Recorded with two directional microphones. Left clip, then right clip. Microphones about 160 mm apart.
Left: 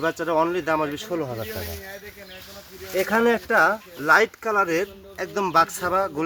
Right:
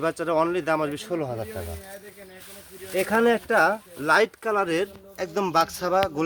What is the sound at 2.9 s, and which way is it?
A man's voice, 35° right (ahead or behind).